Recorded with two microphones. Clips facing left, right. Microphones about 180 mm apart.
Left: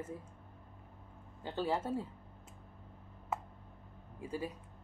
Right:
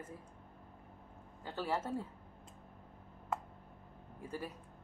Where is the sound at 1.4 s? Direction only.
20° left (ahead or behind).